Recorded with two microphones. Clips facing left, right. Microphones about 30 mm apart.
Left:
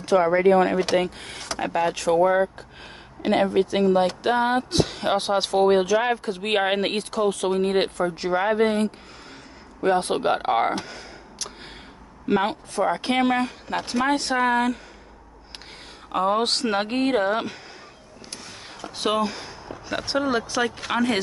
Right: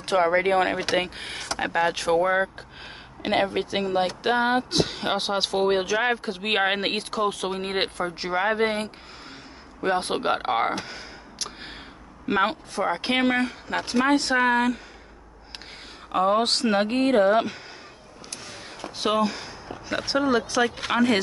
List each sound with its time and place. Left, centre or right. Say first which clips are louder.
0.0 s speech: left 2 dB; right
0.3 s speech: left 3 dB; right
1.6 s speech: even; centre
9.9 s speech: left 2 dB; centre
10.8 s gasp: even; centre
12.3 s speech: left 1 dB; centre
16.1 s speech: right 1 dB; centre
18.9 s speech: even; centre